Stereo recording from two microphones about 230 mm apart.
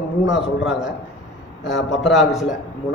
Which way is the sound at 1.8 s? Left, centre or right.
Left.